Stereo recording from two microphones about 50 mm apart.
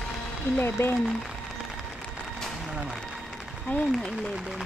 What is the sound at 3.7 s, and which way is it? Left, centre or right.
Speech, left.